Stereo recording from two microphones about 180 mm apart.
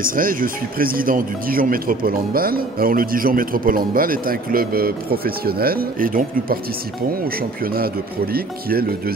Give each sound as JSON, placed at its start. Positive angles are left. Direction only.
{"t": 0.0, "sound": "speech", "side_deg": -50}